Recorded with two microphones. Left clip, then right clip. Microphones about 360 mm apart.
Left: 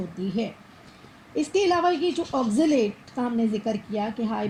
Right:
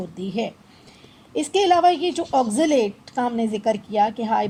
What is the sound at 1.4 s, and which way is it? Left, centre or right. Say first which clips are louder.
A woman's voice: right 5 dB; right.